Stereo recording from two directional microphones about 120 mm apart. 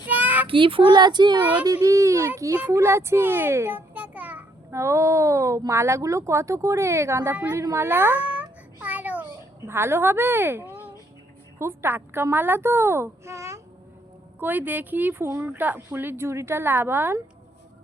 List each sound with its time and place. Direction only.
0.0 s child singing: 15° right (ahead or behind)
0.4 s a woman's voice: 45° right (ahead or behind); by 4.4 s 10° right (ahead or behind)
4.7 s a woman's voice: 25° right (ahead or behind)
7.3 s speech: 15° right (ahead or behind)
7.6 s a sound: 25° right (ahead or behind)
9.6 s a woman's voice: 20° right (ahead or behind)